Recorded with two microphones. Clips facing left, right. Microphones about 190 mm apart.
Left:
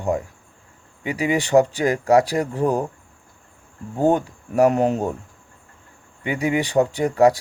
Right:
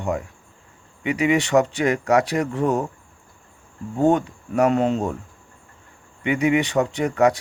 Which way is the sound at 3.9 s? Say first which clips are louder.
Even; 35° left (ahead or behind).